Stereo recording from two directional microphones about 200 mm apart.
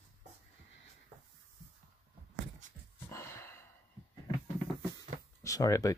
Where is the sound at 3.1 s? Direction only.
15° left (ahead or behind).